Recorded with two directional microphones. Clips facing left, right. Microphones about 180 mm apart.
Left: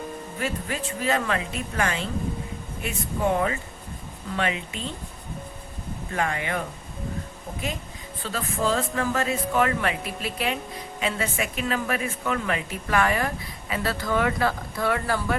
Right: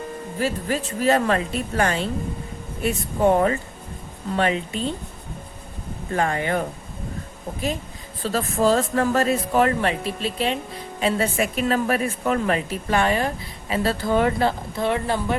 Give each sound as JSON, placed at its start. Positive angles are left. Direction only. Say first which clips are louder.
{"t": 0.3, "sound": "speech", "louder": "right 6 dB", "side_deg": -35}
{"t": 6.1, "sound": "speech", "louder": "right 5 dB", "side_deg": -35}
{"t": 8.2, "sound": "speech", "louder": "right 6 dB", "side_deg": -40}